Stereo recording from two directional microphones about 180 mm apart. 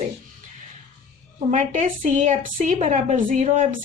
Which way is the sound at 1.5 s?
40° right (ahead or behind).